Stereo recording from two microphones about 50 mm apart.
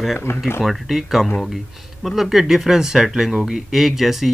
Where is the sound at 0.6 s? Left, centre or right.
Centre.